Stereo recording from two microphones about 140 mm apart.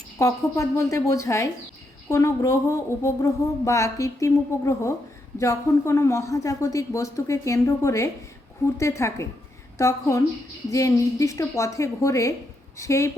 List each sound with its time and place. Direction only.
0.2 s a woman's voice: 25° left (ahead or behind)